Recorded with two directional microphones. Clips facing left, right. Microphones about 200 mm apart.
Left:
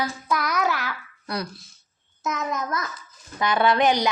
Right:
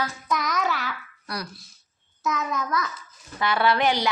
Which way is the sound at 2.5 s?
45° left (ahead or behind).